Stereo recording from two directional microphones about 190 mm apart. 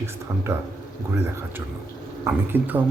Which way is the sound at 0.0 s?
15° right (ahead or behind).